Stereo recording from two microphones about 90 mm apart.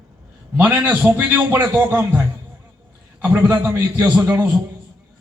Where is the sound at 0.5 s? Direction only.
25° right (ahead or behind).